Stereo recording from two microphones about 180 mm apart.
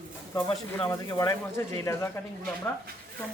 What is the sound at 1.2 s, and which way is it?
Speech, 15° left (ahead or behind).